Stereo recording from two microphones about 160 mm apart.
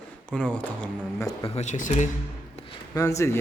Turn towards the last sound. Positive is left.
turn(degrees=20)  # may be behind; listen again after turning